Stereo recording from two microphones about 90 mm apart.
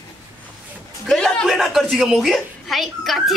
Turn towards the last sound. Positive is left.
turn(degrees=0)  # may be behind; listen again after turning